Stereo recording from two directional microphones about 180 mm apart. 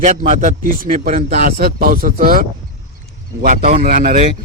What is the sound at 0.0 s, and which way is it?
A man's voice, 45° right (ahead or behind).